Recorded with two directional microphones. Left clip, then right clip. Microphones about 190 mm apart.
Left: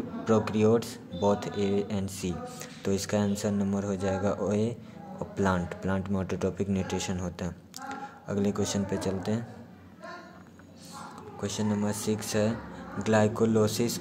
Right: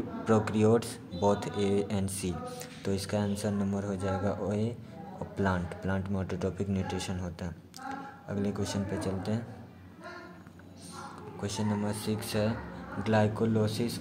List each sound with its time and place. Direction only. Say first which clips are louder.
0.2 s speech: left 2 dB; 5° left (ahead or behind)
11.4 s speech: left 3 dB; 15° left (ahead or behind)